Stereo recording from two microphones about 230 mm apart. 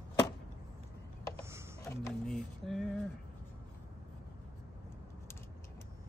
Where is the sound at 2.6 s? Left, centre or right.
Centre.